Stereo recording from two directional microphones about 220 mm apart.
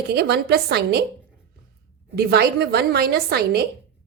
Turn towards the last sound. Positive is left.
turn(degrees=-45)  # may be behind; listen again after turning